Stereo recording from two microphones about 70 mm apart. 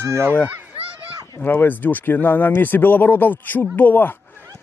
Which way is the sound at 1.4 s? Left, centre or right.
Left.